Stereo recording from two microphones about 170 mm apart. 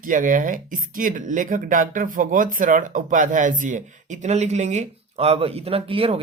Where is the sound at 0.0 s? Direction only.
50° right (ahead or behind).